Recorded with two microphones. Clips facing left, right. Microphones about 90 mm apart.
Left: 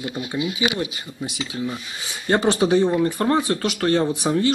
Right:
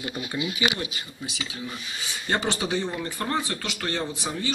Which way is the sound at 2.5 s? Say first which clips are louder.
Left 9 dB; 45° left (ahead or behind).